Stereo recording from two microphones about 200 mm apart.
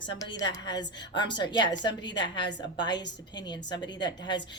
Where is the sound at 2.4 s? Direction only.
60° left (ahead or behind).